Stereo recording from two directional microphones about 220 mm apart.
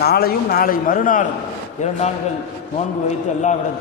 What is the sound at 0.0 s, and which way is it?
Speech, 45° left (ahead or behind).